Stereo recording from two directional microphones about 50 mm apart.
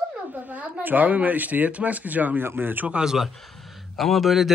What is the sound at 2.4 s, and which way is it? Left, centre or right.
Speech, right.